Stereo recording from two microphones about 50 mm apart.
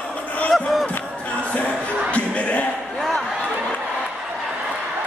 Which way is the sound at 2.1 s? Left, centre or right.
Left.